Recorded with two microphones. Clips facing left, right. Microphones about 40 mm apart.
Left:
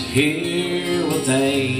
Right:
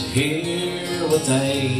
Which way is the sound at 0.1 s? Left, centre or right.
Left.